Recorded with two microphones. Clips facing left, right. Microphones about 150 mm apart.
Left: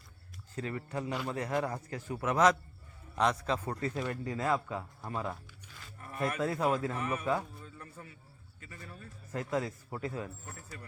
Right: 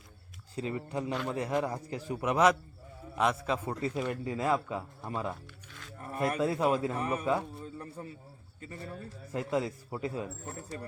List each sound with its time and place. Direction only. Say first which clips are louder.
0.5 s a man's voice: right 3 dB; 20° right (ahead or behind)
5.3 s music: right 2 dB; 5° left (ahead or behind)
6.1 s speech: right 3 dB; 30° right (ahead or behind)
6.4 s a man's voice: right 2 dB; 20° right (ahead or behind)
6.9 s speech: right 3 dB; 30° right (ahead or behind)
7.6 s a sound: right 7 dB; 35° right (ahead or behind)
8.6 s speech: right 7 dB; 35° right (ahead or behind)
9.3 s a man's voice: right 2 dB; 20° right (ahead or behind)
10.4 s speech: right 7 dB; 30° right (ahead or behind)